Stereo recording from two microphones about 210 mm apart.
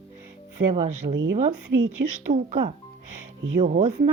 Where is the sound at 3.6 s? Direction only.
35° right (ahead or behind).